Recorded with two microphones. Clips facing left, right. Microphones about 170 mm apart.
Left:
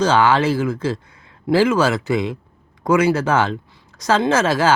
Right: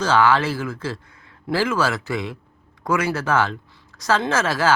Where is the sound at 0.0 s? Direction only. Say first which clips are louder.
Left 3 dB; 20° left (ahead or behind).